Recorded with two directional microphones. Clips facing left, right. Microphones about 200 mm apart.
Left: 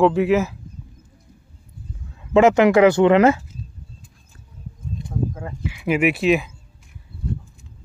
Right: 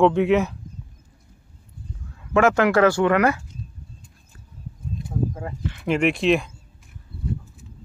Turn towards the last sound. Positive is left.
turn(degrees=5)  # may be behind; listen again after turning